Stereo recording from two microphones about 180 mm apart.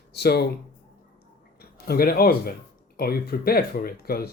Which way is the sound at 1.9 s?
60° left (ahead or behind).